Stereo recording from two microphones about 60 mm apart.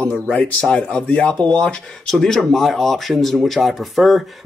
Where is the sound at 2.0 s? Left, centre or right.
Centre.